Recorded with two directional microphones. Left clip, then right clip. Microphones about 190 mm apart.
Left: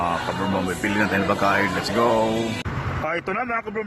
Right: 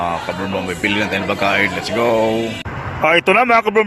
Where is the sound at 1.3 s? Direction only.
Centre (ahead or behind).